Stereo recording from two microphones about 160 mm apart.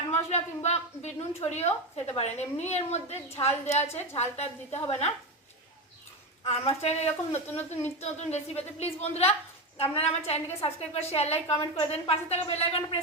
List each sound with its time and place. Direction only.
0.1 s a woman's voice: 45° left (ahead or behind)
6.4 s a woman's voice: 40° left (ahead or behind)